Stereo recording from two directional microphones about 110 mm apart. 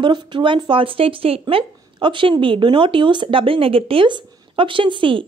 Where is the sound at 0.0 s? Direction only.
45° right (ahead or behind).